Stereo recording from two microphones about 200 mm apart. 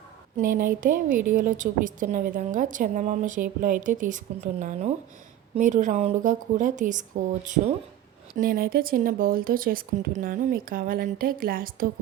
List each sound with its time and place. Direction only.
0.3 s a woman's voice: 40° right (ahead or behind)
8.4 s speech: 45° right (ahead or behind)